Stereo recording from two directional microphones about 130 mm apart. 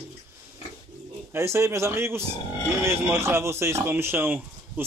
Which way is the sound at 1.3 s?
20° right (ahead or behind).